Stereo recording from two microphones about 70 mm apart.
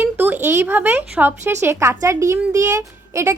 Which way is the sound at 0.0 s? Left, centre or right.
Right.